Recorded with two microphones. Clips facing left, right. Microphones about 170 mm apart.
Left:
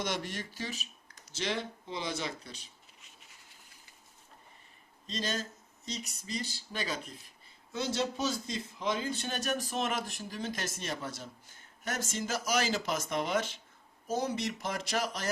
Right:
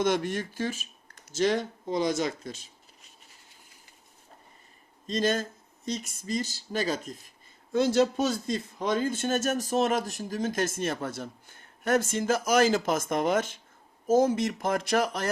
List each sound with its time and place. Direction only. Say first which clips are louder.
0.0 s speech: right 9 dB; 50° right (ahead or behind)
5.0 s speech: right 9 dB; 50° right (ahead or behind)